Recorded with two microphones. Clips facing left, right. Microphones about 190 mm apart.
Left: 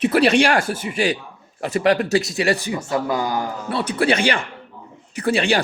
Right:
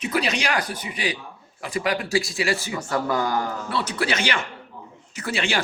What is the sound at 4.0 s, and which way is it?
Speech, 30° left (ahead or behind).